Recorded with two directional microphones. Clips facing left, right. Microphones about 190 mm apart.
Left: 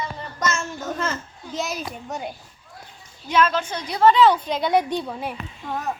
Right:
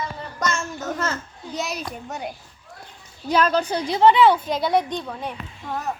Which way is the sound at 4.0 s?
15° right (ahead or behind).